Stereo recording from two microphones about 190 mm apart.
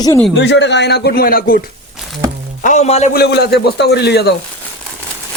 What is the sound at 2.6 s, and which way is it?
Speech, 35° left (ahead or behind).